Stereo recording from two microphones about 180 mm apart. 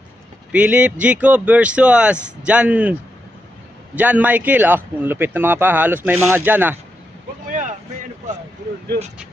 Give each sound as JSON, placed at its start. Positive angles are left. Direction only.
{"t": 0.5, "sound": "speech", "side_deg": -5}
{"t": 3.9, "sound": "speech", "side_deg": -10}
{"t": 7.4, "sound": "vehicle", "side_deg": -45}
{"t": 8.3, "sound": "a sound", "side_deg": -40}